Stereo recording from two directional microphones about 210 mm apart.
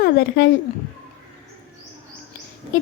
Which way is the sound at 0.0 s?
50° left (ahead or behind).